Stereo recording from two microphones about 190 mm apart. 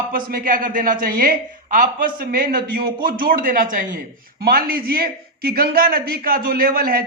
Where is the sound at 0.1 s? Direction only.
50° right (ahead or behind).